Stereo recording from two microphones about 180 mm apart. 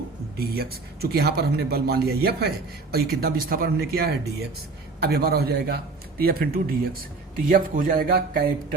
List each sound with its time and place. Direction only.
0.3 s a man's voice: 60° right (ahead or behind)